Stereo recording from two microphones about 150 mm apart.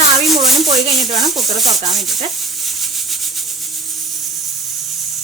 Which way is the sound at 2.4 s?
Centre (ahead or behind).